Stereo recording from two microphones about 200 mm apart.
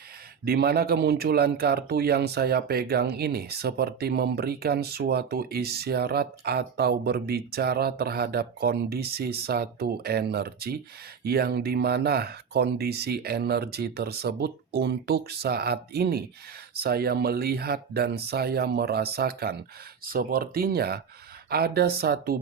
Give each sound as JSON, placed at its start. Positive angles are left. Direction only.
{"t": 0.4, "sound": "speech", "side_deg": -50}